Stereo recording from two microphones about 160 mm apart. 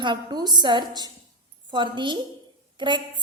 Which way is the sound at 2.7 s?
30° right (ahead or behind).